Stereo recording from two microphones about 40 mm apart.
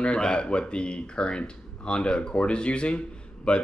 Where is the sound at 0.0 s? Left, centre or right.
Left.